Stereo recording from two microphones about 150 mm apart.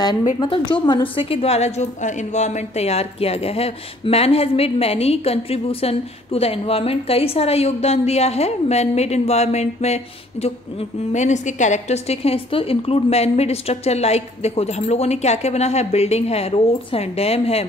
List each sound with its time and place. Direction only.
0.4 s a woman's voice: 30° left (ahead or behind)